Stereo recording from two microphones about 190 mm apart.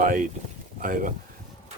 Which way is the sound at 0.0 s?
45° right (ahead or behind).